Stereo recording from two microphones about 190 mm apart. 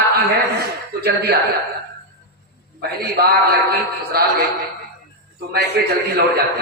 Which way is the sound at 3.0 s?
55° right (ahead or behind).